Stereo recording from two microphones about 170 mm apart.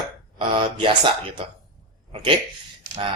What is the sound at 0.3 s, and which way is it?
Speech, 30° right (ahead or behind).